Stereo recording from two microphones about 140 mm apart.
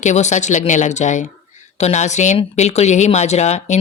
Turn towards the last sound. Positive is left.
turn(degrees=55)  # may be behind; listen again after turning